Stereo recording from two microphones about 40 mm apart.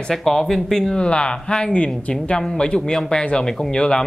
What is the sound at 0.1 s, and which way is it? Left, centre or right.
Speech, centre.